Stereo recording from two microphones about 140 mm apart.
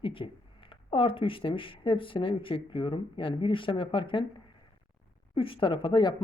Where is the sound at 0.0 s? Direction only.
40° left (ahead or behind).